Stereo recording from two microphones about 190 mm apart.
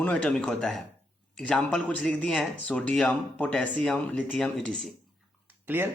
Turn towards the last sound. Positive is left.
turn(degrees=-10)  # may be behind; listen again after turning